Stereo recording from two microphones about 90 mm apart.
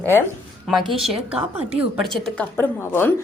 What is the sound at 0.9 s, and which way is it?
Speech, centre (ahead or behind).